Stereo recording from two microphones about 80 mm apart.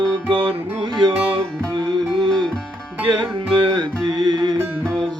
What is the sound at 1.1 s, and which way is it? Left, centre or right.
Music, right.